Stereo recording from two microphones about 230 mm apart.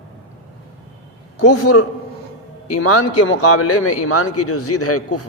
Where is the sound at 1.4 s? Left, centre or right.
Left.